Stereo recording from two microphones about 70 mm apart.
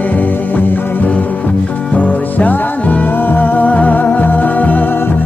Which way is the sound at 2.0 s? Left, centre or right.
Left.